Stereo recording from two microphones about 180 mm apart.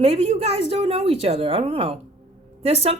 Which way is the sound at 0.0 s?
35° right (ahead or behind).